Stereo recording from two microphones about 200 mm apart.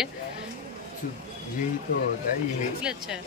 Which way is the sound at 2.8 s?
5° right (ahead or behind).